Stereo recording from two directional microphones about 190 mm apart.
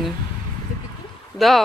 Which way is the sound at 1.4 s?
Centre (ahead or behind).